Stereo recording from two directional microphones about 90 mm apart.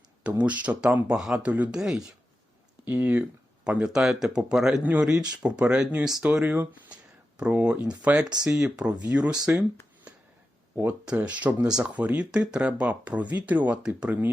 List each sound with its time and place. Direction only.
0.2 s speech: 15° right (ahead or behind)
1.8 s speech: 5° right (ahead or behind)
2.8 s speech: 20° right (ahead or behind)
6.4 s speech: 20° right (ahead or behind)
11.0 s speech: 10° right (ahead or behind)